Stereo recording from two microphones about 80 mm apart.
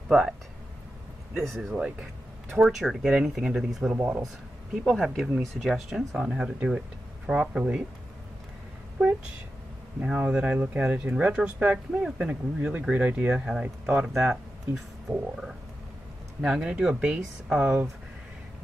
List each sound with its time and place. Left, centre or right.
1.3 s speech: centre
3.9 s speech: right
4.8 s speech: centre
10.0 s speech: centre